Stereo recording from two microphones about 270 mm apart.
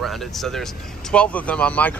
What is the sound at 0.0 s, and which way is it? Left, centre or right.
Speech, centre.